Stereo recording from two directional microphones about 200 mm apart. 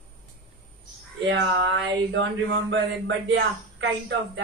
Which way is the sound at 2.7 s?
65° right (ahead or behind).